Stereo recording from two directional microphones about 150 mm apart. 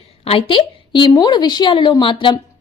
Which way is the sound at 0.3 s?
35° left (ahead or behind).